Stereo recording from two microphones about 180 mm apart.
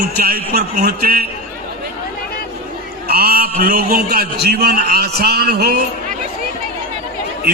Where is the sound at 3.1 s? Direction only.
60° right (ahead or behind).